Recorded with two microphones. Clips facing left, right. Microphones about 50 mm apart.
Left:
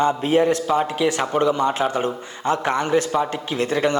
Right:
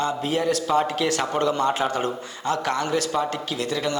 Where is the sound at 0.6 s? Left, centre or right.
Centre.